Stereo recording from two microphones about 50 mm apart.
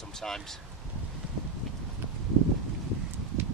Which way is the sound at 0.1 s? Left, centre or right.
Centre.